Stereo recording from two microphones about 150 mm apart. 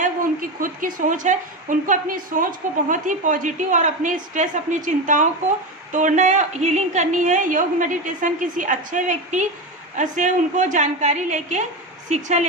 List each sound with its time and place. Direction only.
0.6 s a woman's voice: 65° right (ahead or behind)